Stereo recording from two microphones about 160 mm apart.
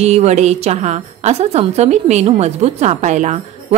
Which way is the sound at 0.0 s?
40° right (ahead or behind).